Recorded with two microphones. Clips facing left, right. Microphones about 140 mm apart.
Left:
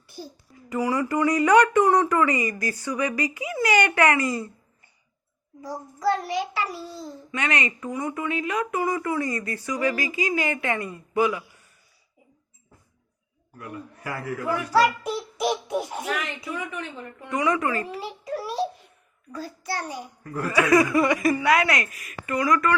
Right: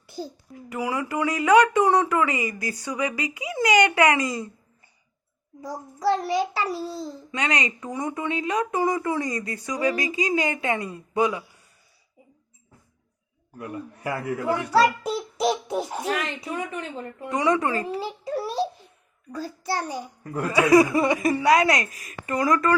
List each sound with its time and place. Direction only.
0.7 s speech: 10° right (ahead or behind)
6.1 s a child's voice: 30° right (ahead or behind)
7.3 s a child's voice: 20° right (ahead or behind)
13.6 s a child's voice: 25° right (ahead or behind)